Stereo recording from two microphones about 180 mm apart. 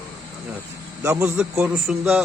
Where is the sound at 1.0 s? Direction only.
15° right (ahead or behind).